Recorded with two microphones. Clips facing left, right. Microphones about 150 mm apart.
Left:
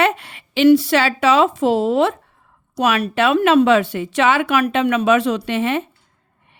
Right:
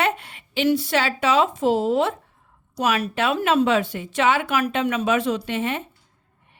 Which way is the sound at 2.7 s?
70° left (ahead or behind).